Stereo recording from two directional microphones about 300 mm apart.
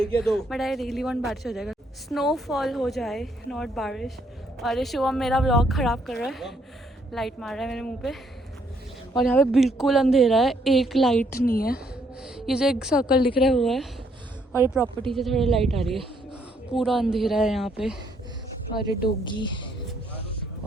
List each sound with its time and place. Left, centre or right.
0.0 s speech: centre
11.2 s a woman's voice: left
12.2 s a woman's voice: centre
16.7 s speech: centre
18.7 s speech: left
19.2 s speech: centre